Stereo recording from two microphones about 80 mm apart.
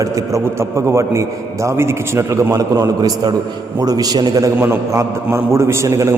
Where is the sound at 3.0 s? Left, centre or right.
Right.